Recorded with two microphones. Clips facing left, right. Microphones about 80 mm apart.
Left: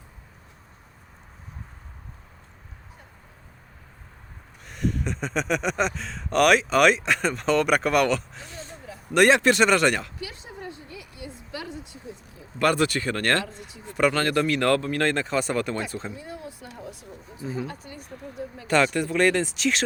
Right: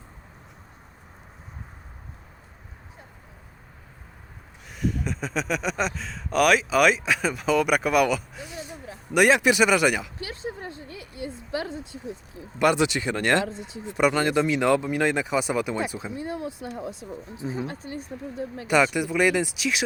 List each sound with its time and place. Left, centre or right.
4.7 s speech: centre
10.2 s a sound: right
12.5 s speech: centre
16.4 s speech: right
18.7 s speech: centre